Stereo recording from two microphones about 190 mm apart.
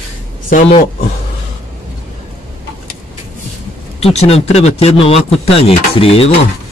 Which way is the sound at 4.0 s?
35° left (ahead or behind).